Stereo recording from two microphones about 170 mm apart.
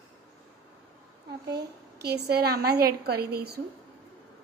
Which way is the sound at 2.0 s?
70° right (ahead or behind).